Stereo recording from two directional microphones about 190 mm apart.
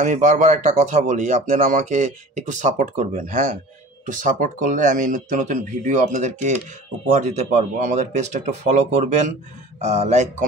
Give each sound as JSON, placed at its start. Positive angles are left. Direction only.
{"t": 0.0, "sound": "speech", "side_deg": -40}